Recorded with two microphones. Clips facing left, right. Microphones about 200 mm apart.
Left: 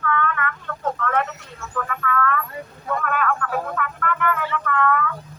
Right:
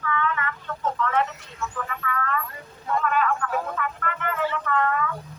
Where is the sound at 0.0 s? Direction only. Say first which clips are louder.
Left 3 dB; 55° left (ahead or behind).